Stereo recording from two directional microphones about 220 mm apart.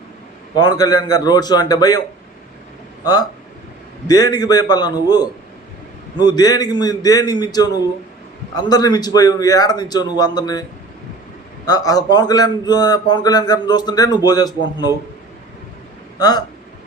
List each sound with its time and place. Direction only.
0.5 s a man's voice: 20° left (ahead or behind)
3.0 s a man's voice: 20° left (ahead or behind)
16.1 s speech: 15° left (ahead or behind)